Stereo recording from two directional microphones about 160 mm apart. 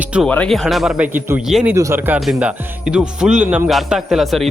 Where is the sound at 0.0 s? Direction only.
5° right (ahead or behind).